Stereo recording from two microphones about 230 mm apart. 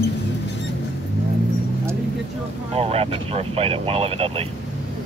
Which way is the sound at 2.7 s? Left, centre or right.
Right.